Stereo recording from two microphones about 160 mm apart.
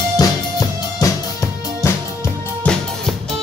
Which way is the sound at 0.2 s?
25° left (ahead or behind).